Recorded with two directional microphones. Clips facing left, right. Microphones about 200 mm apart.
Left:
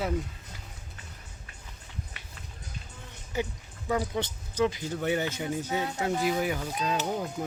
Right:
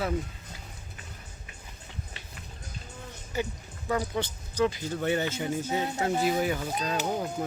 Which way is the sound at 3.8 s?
20° left (ahead or behind).